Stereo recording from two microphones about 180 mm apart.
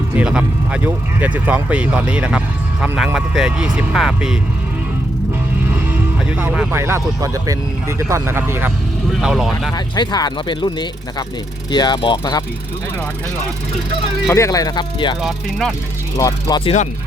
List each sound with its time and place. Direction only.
0.2 s speech: 5° right (ahead or behind)
6.4 s speech: 10° right (ahead or behind)
9.7 s speech: 25° left (ahead or behind)
14.3 s speech: 15° left (ahead or behind)
15.2 s speech: centre (ahead or behind)
16.1 s speech: 20° left (ahead or behind)